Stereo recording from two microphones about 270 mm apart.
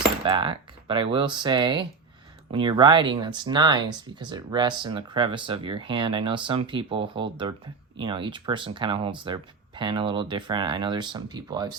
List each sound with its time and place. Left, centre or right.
0.3 s speech: centre